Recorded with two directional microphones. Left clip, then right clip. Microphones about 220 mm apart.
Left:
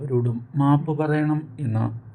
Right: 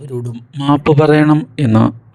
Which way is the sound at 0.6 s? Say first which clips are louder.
Right 11 dB; 40° right (ahead or behind).